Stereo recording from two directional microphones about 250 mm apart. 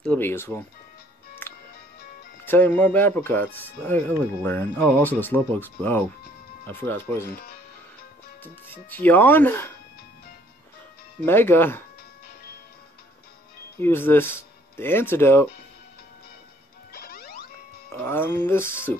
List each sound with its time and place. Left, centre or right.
0.0 s speech: centre
1.4 s music: centre
2.4 s speech: centre
8.4 s speech: centre
11.2 s speech: centre
13.7 s speech: centre
16.9 s music: left
18.0 s speech: centre